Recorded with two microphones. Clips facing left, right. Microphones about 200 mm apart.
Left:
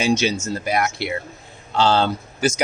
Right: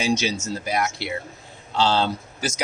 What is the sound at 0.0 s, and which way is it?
Speech, 55° left (ahead or behind).